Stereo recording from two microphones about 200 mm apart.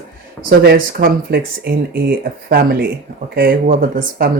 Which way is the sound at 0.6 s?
50° right (ahead or behind).